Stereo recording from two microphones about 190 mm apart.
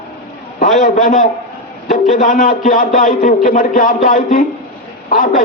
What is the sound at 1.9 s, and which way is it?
A man's voice, 45° left (ahead or behind).